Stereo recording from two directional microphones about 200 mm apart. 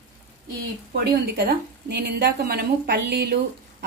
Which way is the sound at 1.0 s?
55° right (ahead or behind).